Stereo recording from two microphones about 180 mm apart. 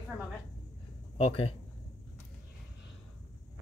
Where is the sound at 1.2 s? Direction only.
35° left (ahead or behind).